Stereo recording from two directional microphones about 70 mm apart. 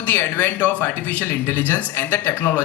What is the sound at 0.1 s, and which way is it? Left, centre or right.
Speech, left.